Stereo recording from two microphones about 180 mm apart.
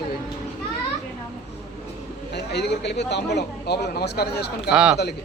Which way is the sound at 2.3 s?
70° left (ahead or behind).